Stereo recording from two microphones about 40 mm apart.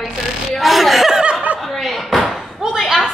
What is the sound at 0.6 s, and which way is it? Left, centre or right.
Speech, centre.